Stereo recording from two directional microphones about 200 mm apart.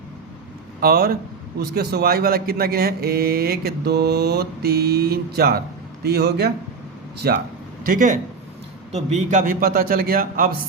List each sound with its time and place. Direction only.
0.8 s speech: 50° right (ahead or behind)
7.9 s speech: 40° right (ahead or behind)